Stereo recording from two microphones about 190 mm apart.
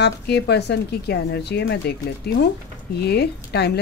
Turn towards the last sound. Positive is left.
turn(degrees=60)  # may be behind; listen again after turning